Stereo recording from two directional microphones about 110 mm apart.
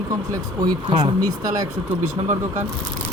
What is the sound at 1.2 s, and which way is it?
Speech, 35° right (ahead or behind).